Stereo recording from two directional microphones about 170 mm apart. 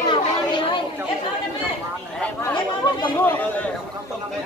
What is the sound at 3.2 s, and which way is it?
Speech, 10° left (ahead or behind).